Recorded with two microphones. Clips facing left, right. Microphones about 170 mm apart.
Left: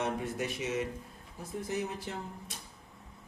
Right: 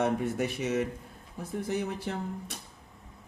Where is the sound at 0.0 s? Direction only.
60° right (ahead or behind).